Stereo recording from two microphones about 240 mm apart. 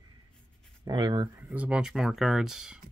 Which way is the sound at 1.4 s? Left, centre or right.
Centre.